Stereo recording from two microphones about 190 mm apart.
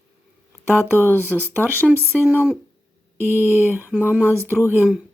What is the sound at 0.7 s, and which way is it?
Speech, 10° left (ahead or behind).